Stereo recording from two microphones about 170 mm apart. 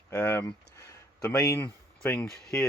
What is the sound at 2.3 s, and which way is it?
Speech, centre (ahead or behind).